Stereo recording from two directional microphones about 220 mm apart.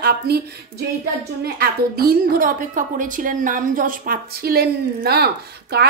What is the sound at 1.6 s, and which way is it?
A woman's voice, 45° right (ahead or behind).